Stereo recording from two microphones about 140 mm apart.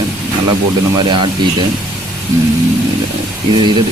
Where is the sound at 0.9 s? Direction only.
35° right (ahead or behind).